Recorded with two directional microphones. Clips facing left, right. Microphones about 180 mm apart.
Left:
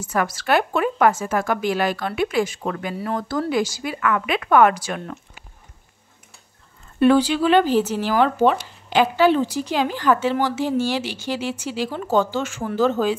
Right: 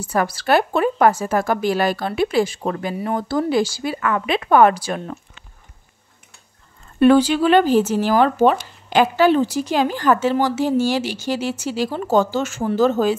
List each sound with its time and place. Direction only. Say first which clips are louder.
0.0 s a woman's voice: right 2 dB; 35° right (ahead or behind)
7.0 s speech: right 3 dB; 50° right (ahead or behind)